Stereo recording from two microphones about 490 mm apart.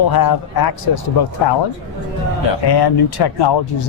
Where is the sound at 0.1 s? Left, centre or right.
Left.